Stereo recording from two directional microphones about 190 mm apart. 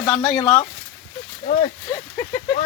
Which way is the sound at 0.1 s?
5° left (ahead or behind).